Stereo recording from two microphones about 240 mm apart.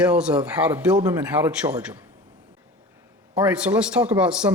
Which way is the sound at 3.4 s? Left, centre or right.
Centre.